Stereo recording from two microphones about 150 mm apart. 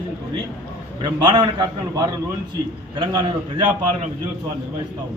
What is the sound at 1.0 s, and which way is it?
A man's voice, 30° right (ahead or behind).